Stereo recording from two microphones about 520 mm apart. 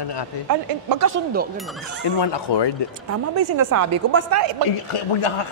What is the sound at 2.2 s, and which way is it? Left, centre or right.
Speech, left.